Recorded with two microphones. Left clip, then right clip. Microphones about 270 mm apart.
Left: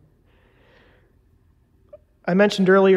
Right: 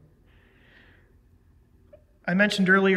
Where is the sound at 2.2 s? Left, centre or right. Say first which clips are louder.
Left 5 dB; left.